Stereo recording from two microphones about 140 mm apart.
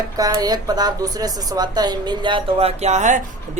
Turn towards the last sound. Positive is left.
turn(degrees=-55)  # may be behind; listen again after turning